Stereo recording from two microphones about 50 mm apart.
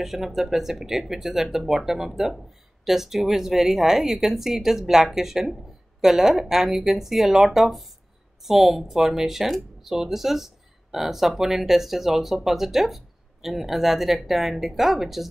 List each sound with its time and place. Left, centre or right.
0.0 s speech: centre